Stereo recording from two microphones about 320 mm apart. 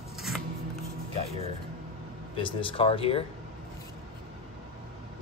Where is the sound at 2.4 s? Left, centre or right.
Centre.